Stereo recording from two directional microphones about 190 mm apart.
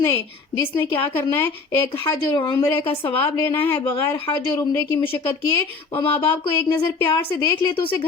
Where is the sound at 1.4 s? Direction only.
20° left (ahead or behind).